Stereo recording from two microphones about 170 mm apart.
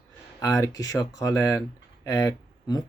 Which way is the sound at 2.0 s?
20° left (ahead or behind).